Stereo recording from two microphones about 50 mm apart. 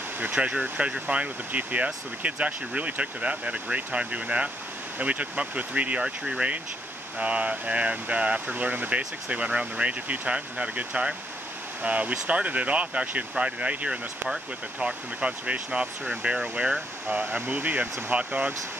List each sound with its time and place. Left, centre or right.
0.2 s speech: right
6.0 s speech: centre
7.2 s speech: right
18.1 s speech: right